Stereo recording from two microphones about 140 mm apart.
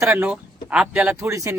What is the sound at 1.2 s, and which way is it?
Speech, 20° right (ahead or behind).